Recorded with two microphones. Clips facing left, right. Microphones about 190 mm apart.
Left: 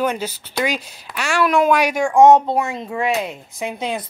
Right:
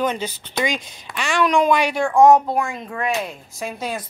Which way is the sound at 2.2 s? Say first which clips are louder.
Left 2 dB; 25° left (ahead or behind).